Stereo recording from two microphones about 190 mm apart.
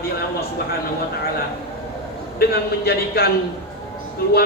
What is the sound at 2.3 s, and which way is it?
Speech, 55° left (ahead or behind).